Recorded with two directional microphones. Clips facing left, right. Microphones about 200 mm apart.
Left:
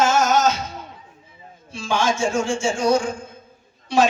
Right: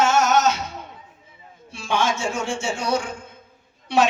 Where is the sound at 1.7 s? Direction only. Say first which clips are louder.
Left 1 dB; 60° right (ahead or behind).